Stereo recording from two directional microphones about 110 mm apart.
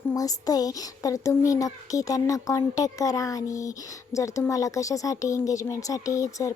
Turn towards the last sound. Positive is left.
turn(degrees=30)  # may be behind; listen again after turning